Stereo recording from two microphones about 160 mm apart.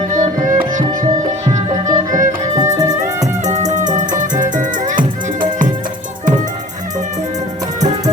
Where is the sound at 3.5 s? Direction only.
45° right (ahead or behind).